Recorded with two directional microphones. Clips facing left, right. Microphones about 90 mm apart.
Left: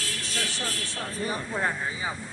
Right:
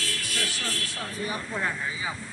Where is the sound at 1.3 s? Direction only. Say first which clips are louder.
Left 2 dB; 35° left (ahead or behind).